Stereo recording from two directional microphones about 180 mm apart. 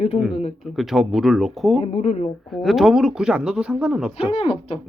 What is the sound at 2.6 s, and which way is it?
Speech, centre (ahead or behind).